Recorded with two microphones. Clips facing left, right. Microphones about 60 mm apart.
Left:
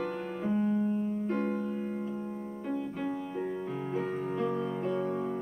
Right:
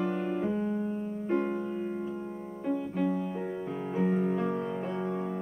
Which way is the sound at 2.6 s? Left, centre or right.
Centre.